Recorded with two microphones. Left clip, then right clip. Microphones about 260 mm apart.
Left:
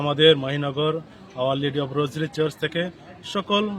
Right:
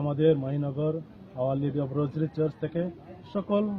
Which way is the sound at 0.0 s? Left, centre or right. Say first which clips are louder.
Left 7 dB; left.